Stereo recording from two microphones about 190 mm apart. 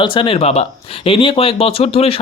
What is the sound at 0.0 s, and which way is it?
Speech, 25° left (ahead or behind).